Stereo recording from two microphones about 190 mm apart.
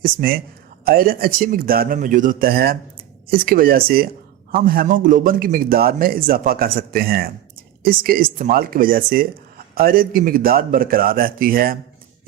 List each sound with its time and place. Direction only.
0.0 s speech: 50° right (ahead or behind)